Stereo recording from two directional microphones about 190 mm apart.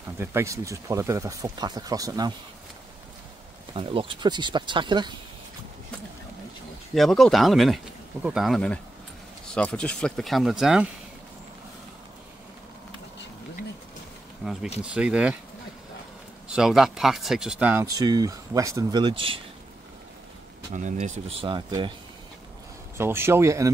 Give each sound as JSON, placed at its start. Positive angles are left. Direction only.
{"t": 0.2, "sound": "speech", "side_deg": -15}
{"t": 3.7, "sound": "speech", "side_deg": -30}
{"t": 7.0, "sound": "speech", "side_deg": 0}
{"t": 14.4, "sound": "speech", "side_deg": 0}
{"t": 16.4, "sound": "speech", "side_deg": -5}
{"t": 20.7, "sound": "speech", "side_deg": -40}
{"t": 22.9, "sound": "speech", "side_deg": -10}